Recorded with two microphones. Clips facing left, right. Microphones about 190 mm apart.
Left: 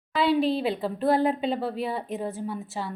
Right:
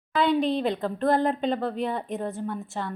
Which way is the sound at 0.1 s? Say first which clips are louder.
Even; 5° left (ahead or behind).